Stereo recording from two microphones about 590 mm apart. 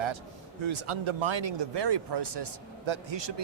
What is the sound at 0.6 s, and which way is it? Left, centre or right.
Speech, right.